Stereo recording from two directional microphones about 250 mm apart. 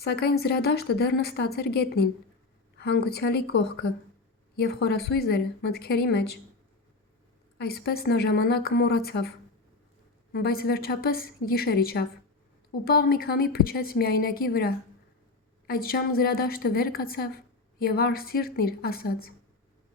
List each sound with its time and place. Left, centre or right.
0.0 s a woman's voice: left
7.6 s a woman's voice: left
10.3 s a woman's voice: left